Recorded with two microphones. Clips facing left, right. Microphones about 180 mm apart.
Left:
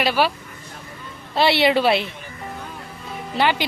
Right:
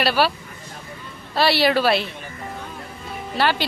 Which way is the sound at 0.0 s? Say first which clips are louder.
Even; 15° left (ahead or behind).